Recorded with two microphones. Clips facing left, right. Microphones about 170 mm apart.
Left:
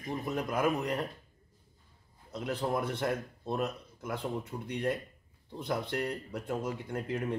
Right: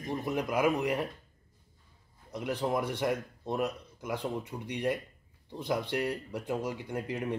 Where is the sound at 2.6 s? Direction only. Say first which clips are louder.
Right 1 dB; 5° right (ahead or behind).